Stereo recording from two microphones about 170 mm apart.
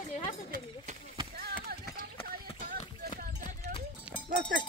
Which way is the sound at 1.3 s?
65° right (ahead or behind).